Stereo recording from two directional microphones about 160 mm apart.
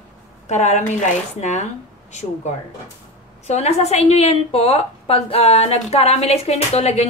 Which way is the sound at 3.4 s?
45° left (ahead or behind).